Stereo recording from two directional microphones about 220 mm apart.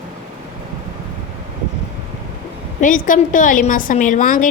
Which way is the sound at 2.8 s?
35° left (ahead or behind).